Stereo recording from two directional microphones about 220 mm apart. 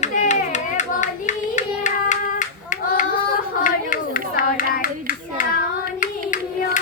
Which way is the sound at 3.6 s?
35° left (ahead or behind).